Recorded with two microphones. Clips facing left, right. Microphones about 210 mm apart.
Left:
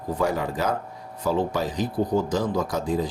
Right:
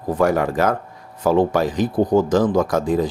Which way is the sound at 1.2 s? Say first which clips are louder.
Right 7 dB; 90° right.